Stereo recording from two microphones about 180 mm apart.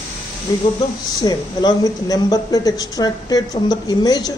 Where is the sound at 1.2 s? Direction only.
20° left (ahead or behind).